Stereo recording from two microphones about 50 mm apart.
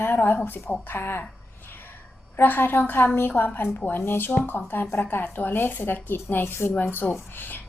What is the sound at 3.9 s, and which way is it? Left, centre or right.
A woman's voice, left.